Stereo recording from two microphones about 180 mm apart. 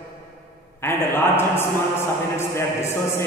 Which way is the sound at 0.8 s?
15° left (ahead or behind).